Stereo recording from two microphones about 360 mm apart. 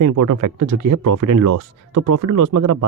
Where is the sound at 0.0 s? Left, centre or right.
Right.